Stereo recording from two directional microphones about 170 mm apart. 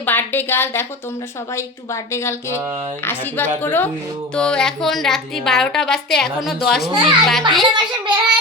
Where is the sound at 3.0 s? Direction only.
10° left (ahead or behind).